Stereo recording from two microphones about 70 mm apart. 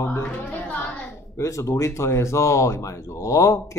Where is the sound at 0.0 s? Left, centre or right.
Left.